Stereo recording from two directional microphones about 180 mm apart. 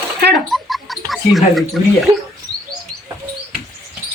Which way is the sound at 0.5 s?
Centre (ahead or behind).